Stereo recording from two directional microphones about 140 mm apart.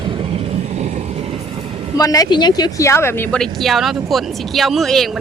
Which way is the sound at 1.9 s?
25° left (ahead or behind).